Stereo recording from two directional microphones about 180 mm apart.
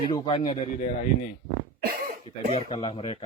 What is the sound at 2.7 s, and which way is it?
Speech, 30° left (ahead or behind).